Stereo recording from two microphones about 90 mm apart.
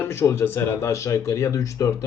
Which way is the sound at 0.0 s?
30° left (ahead or behind).